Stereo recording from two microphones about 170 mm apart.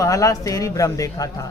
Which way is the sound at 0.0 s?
20° left (ahead or behind).